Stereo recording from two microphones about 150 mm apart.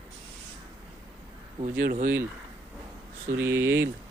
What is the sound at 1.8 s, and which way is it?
Speech, 60° right (ahead or behind).